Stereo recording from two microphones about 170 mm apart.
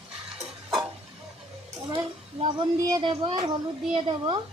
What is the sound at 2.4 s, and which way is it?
Speech, 25° right (ahead or behind).